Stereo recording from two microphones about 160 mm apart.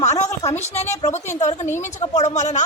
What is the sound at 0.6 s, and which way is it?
Speech, 45° left (ahead or behind).